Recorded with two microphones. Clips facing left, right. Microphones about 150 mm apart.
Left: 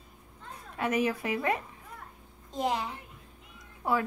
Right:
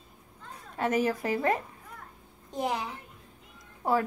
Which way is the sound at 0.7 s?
35° right (ahead or behind).